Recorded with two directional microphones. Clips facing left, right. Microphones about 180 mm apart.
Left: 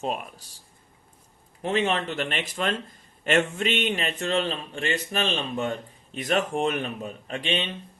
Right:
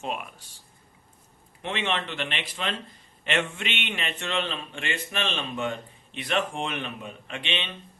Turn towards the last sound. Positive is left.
turn(degrees=40)  # may be behind; listen again after turning